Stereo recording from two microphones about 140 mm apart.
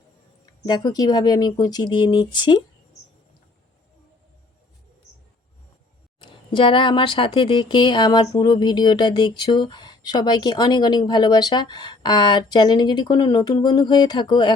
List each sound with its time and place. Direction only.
0.6 s speech: 30° left (ahead or behind)
6.1 s speech: 35° left (ahead or behind)